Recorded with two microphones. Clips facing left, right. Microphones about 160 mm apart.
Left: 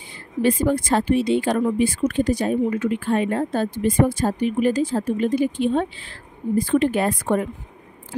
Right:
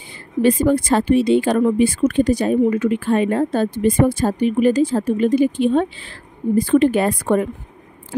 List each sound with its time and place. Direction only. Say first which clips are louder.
0.4 s speech: right 4 dB; 75° right (ahead or behind)